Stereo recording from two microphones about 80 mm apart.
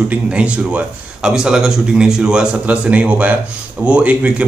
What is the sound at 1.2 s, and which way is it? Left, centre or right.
Speech, centre.